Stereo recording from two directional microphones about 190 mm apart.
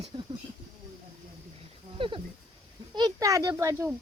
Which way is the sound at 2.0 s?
25° right (ahead or behind).